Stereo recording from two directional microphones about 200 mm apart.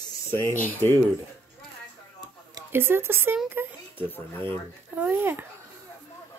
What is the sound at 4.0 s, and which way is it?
Speech, 10° left (ahead or behind).